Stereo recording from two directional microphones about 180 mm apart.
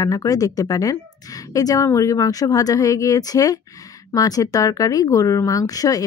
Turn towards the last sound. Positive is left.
turn(degrees=20)  # may be behind; listen again after turning